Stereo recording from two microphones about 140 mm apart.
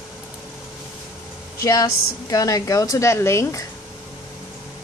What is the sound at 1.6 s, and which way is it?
A woman's voice, 25° left (ahead or behind).